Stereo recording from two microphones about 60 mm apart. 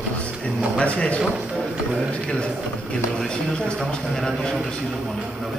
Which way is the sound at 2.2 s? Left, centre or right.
Centre.